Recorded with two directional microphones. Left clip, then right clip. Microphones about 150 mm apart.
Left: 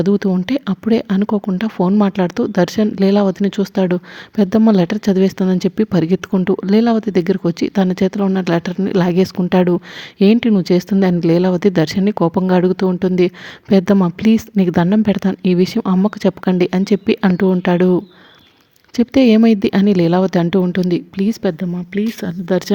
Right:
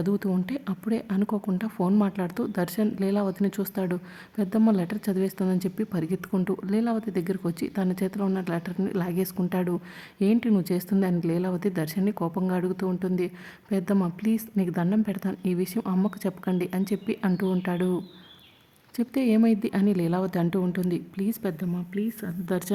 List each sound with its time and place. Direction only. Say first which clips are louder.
0.0 s speech: left 12 dB; 30° left (ahead or behind)